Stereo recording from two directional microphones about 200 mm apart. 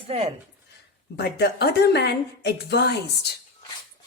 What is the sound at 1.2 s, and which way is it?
A woman's voice, 55° left (ahead or behind).